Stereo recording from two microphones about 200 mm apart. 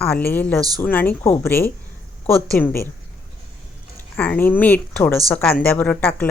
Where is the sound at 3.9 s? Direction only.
10° left (ahead or behind).